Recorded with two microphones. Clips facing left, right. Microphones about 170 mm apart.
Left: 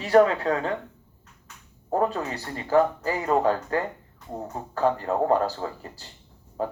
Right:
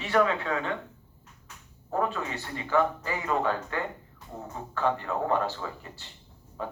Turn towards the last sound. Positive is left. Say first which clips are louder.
# left 7 dB
turn(degrees=40)  # may be behind; listen again after turning